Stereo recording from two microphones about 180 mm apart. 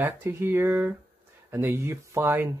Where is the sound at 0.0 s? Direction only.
15° right (ahead or behind).